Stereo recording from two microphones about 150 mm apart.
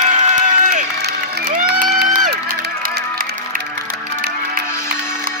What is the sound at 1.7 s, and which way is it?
Crowd, 80° right.